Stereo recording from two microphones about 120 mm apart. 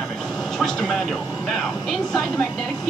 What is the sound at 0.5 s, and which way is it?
Speech, 5° left (ahead or behind).